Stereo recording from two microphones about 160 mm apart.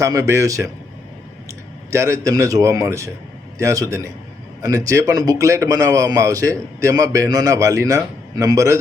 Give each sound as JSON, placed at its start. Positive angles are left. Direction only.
{"t": 0.0, "sound": "a man's voice", "side_deg": -20}